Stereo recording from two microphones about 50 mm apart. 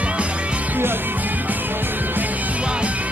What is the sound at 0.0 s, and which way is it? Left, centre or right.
Music, right.